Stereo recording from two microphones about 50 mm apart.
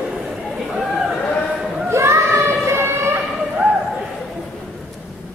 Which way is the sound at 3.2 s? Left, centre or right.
Centre.